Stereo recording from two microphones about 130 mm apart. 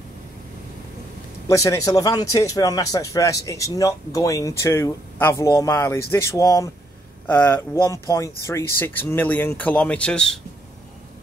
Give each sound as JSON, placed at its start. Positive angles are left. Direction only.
{"t": 1.5, "sound": "speech", "side_deg": 25}
{"t": 7.2, "sound": "speech", "side_deg": 15}